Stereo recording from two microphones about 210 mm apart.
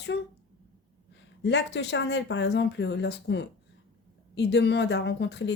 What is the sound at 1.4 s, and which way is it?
Speech, 55° left (ahead or behind).